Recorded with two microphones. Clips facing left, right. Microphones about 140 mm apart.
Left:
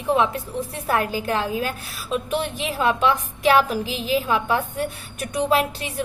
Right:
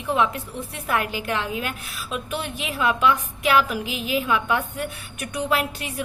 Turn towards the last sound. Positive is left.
turn(degrees=30)  # may be behind; listen again after turning